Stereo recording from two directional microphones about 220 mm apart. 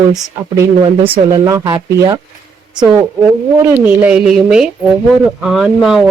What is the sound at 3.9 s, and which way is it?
A woman's voice, 5° right (ahead or behind).